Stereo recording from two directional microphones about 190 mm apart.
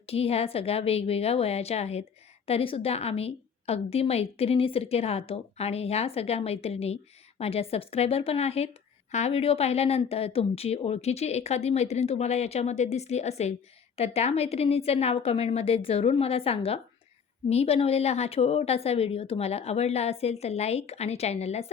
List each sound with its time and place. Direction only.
0.0 s a woman's voice: 30° left (ahead or behind)